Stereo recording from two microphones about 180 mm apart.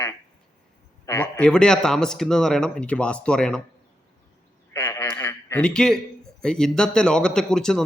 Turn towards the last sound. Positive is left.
turn(degrees=5)  # may be behind; listen again after turning